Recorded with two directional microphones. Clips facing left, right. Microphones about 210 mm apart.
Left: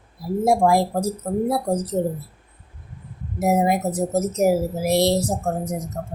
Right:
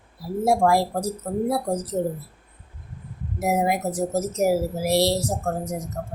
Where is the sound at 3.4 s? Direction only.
25° left (ahead or behind).